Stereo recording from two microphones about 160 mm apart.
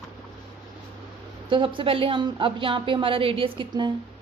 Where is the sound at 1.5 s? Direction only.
30° right (ahead or behind).